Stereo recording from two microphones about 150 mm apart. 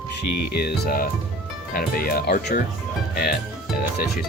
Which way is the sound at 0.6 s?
80° left.